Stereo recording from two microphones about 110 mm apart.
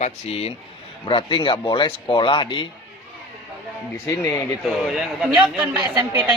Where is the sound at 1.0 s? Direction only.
50° left (ahead or behind).